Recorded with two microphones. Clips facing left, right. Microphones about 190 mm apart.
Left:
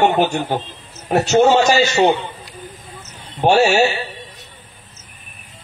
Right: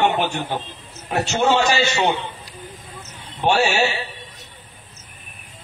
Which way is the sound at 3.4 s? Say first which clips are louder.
Left 5 dB; 45° left (ahead or behind).